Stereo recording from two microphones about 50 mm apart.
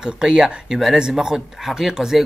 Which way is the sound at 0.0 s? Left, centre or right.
Centre.